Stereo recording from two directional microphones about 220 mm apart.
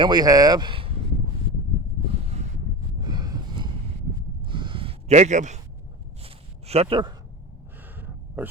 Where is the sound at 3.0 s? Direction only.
20° right (ahead or behind).